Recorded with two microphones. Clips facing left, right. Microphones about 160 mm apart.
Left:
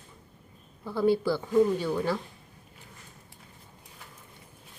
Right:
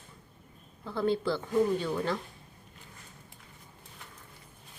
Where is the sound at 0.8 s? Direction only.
10° left (ahead or behind).